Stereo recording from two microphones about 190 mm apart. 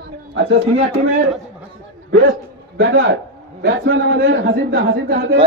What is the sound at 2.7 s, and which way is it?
Speech, 65° right (ahead or behind).